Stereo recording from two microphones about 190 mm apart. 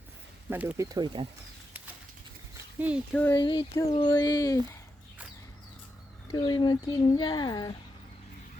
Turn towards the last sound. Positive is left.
turn(degrees=20)  # may be behind; listen again after turning